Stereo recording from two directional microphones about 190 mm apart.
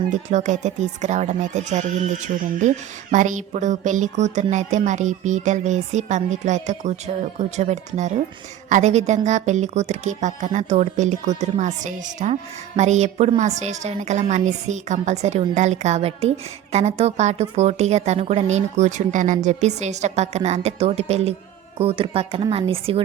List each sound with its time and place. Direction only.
0.1 s speech: 40° right (ahead or behind)